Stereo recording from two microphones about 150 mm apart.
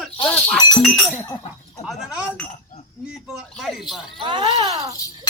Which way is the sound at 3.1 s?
Centre (ahead or behind).